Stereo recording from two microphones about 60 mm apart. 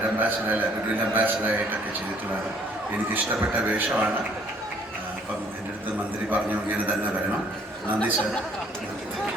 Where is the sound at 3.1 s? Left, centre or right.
Right.